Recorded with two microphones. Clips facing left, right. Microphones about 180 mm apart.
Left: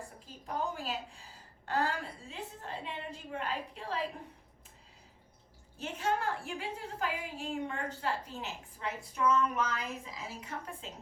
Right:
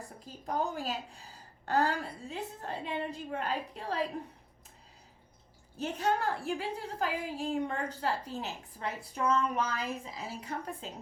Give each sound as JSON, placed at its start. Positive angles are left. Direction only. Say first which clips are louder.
{"t": 0.4, "sound": "a woman's voice", "louder": "right 3 dB", "side_deg": -40}
{"t": 5.7, "sound": "a woman's voice", "louder": "right 3 dB", "side_deg": -40}